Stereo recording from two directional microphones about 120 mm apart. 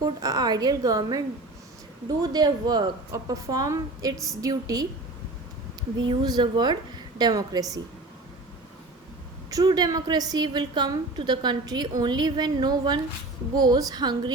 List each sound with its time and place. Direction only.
0.0 s a woman's voice: 30° right (ahead or behind)
6.0 s a woman's voice: 40° right (ahead or behind)
9.5 s a woman's voice: 30° right (ahead or behind)